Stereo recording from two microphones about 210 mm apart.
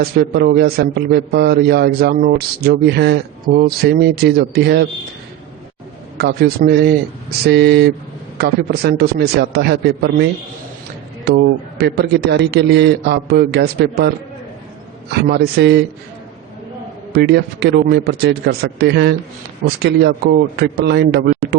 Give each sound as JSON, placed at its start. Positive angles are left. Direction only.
{"t": 0.0, "sound": "a man's voice", "side_deg": -50}
{"t": 6.1, "sound": "a man's voice", "side_deg": -50}
{"t": 11.3, "sound": "a man's voice", "side_deg": -55}
{"t": 15.1, "sound": "a man's voice", "side_deg": -50}
{"t": 17.1, "sound": "a man's voice", "side_deg": -50}